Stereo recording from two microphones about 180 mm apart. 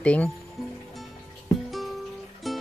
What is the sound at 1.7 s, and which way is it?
Music, centre (ahead or behind).